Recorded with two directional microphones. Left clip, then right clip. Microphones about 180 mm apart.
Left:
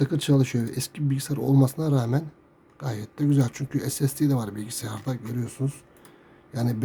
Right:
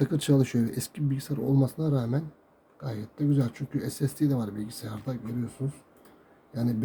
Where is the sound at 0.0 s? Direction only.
10° left (ahead or behind).